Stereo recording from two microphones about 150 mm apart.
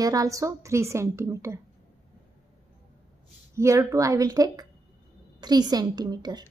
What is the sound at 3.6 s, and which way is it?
A woman's voice, 20° right (ahead or behind).